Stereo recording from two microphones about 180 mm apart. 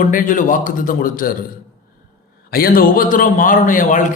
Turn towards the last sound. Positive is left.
turn(degrees=45)  # may be behind; listen again after turning